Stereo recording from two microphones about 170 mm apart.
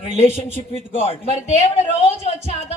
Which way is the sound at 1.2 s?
40° right (ahead or behind).